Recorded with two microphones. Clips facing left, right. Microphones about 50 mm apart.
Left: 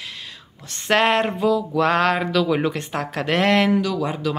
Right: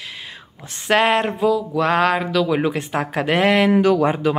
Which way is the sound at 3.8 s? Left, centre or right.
Right.